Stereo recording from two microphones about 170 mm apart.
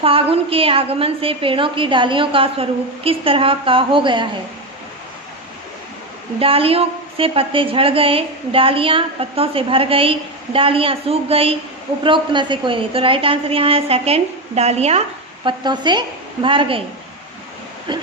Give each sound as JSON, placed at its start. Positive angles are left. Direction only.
{"t": 0.0, "sound": "a woman's voice", "side_deg": -35}
{"t": 6.4, "sound": "a woman's voice", "side_deg": -35}
{"t": 15.4, "sound": "a woman's voice", "side_deg": -25}